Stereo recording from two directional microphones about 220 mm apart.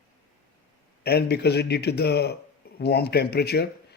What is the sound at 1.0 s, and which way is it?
Speech, 45° left (ahead or behind).